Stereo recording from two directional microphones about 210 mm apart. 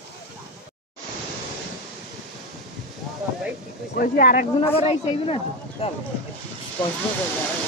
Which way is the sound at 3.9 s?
40° left (ahead or behind).